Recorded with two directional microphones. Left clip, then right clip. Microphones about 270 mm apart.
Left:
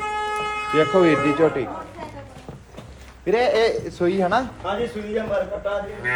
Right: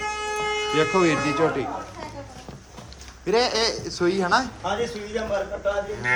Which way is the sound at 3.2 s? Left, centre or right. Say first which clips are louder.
Left 3 dB; centre.